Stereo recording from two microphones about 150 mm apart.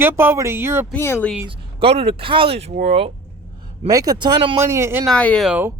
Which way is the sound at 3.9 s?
25° right (ahead or behind).